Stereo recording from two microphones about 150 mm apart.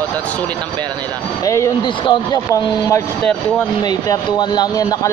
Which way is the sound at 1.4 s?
20° left (ahead or behind).